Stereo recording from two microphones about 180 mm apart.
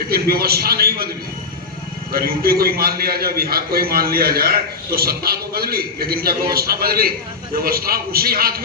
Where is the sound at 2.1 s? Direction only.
55° right (ahead or behind).